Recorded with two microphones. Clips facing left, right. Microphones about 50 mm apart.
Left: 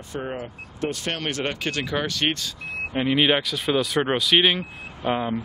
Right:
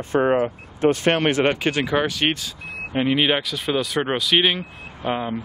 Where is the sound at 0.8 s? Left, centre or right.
Right.